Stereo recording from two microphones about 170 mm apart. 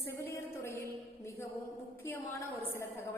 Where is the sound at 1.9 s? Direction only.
15° left (ahead or behind).